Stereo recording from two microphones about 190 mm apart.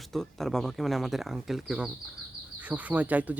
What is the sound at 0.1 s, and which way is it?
Speech, centre (ahead or behind).